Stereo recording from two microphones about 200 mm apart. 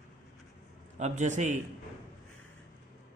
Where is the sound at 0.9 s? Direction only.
35° right (ahead or behind).